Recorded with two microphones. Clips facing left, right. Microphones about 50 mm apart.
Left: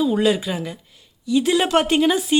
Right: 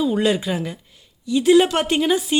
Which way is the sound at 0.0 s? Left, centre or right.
Centre.